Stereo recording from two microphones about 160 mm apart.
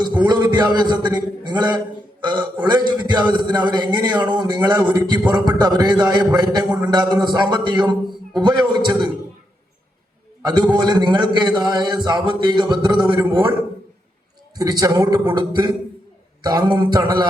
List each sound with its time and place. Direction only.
0.2 s a man's voice: 25° right (ahead or behind)
10.4 s a man's voice: 25° right (ahead or behind)
14.5 s a man's voice: 25° right (ahead or behind)